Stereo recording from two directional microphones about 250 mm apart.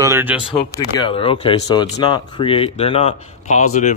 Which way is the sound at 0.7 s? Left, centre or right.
Centre.